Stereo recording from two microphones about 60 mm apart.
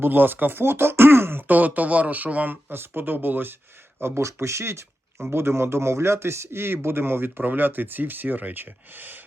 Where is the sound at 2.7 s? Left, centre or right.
Right.